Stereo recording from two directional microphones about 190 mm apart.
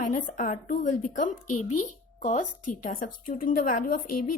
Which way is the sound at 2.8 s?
45° left (ahead or behind).